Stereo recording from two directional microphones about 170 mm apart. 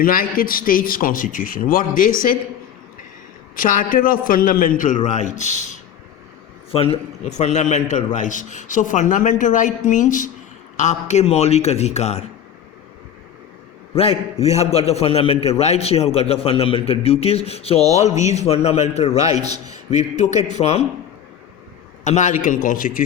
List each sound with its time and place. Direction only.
0.0 s a man's voice: 55° left (ahead or behind)
3.5 s a man's voice: 55° left (ahead or behind)
6.7 s a man's voice: 35° left (ahead or behind)
13.9 s a man's voice: 35° left (ahead or behind)
22.0 s a man's voice: 45° left (ahead or behind)